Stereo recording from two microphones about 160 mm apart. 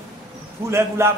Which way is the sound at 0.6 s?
15° right (ahead or behind).